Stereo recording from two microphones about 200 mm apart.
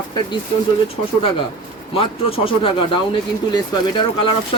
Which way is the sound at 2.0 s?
30° left (ahead or behind).